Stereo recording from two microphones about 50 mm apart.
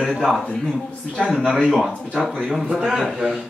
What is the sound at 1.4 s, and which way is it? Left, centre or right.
Speech, centre.